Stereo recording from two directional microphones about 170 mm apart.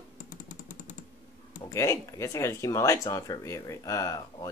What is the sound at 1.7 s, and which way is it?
Speech, 15° left (ahead or behind).